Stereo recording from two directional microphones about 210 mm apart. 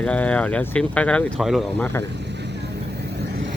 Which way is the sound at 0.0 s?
5° left (ahead or behind).